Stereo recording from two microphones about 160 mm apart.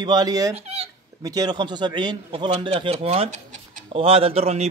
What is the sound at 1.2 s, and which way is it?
A man's voice, 25° right (ahead or behind).